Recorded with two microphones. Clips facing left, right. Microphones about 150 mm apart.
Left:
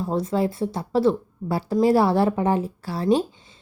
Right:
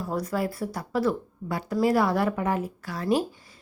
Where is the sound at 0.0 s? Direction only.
25° left (ahead or behind).